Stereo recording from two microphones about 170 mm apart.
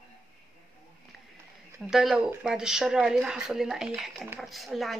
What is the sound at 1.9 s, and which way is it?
Speech, centre (ahead or behind).